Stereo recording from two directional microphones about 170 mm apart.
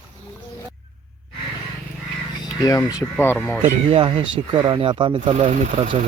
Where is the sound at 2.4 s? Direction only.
20° left (ahead or behind).